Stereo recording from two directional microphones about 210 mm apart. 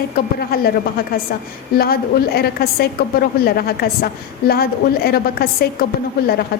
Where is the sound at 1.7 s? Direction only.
45° left (ahead or behind).